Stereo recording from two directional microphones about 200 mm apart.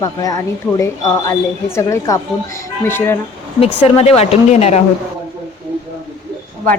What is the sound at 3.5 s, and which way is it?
Speech, 30° left (ahead or behind).